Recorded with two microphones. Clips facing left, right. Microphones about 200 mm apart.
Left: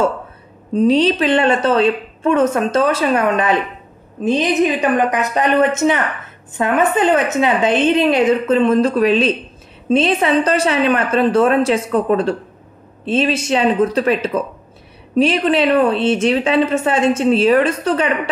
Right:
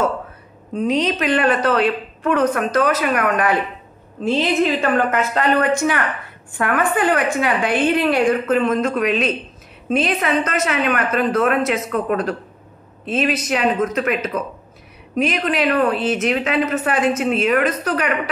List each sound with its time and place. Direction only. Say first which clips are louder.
0.7 s a woman's voice: left 6 dB; 30° left (ahead or behind)